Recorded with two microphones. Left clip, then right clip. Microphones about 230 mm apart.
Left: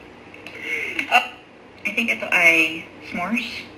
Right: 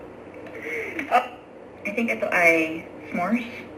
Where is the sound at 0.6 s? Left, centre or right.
Left.